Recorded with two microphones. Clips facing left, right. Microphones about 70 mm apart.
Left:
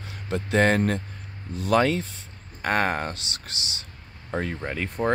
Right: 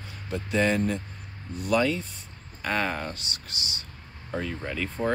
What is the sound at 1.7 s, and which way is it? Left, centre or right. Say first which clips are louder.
Speech: left 3 dB; left.